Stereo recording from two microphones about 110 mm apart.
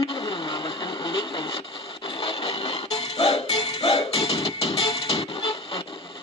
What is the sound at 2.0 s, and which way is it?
Music, 60° left (ahead or behind).